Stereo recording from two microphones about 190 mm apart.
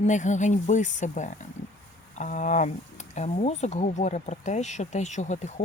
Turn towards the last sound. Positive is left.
turn(degrees=40)  # may be behind; listen again after turning